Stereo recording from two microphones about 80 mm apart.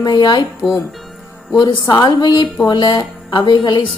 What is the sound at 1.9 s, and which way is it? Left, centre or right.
A woman's voice, left.